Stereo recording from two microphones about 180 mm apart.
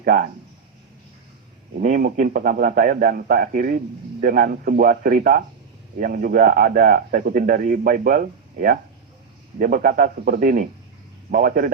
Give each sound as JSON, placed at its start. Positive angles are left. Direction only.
{"t": 0.0, "sound": "speech", "side_deg": -55}
{"t": 1.8, "sound": "a man's voice", "side_deg": -50}